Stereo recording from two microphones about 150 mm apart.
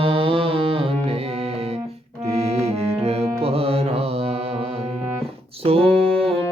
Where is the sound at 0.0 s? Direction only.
40° right (ahead or behind).